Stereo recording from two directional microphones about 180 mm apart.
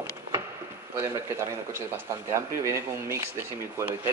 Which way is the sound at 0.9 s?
15° right (ahead or behind).